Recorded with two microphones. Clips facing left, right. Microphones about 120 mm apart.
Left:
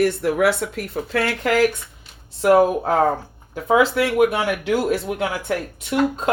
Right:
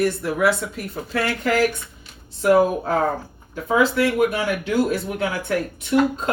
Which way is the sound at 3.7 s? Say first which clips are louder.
Left 1 dB; 85° left.